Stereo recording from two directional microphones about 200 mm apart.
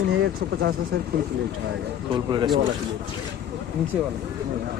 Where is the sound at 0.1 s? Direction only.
60° right (ahead or behind).